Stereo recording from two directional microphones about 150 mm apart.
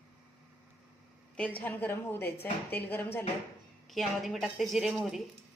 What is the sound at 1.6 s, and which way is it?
A woman's voice, 10° left (ahead or behind).